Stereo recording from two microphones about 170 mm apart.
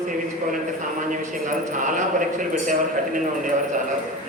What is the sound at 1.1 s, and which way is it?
A man's voice, 50° right (ahead or behind).